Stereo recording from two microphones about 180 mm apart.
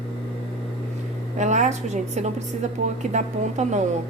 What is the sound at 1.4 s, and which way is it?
A woman's voice, 40° right (ahead or behind).